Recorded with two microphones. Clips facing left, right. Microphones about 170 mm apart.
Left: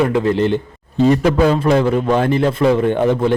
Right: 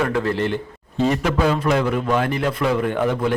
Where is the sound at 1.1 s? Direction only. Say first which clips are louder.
Left 6 dB; 35° left (ahead or behind).